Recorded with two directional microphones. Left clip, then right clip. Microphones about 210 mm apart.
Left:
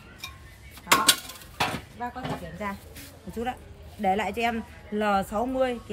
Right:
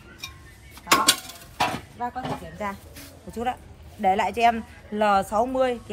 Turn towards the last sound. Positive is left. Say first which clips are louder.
# right 4 dB
turn(degrees=-15)  # may be behind; listen again after turning